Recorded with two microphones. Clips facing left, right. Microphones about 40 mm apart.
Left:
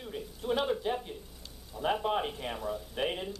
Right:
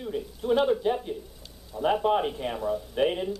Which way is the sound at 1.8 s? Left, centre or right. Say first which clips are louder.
Right 6 dB; centre.